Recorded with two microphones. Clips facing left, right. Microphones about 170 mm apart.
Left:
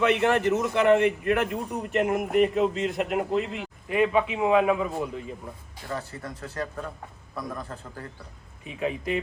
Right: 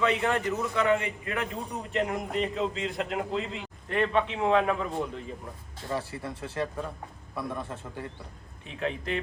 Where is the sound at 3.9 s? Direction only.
5° left (ahead or behind).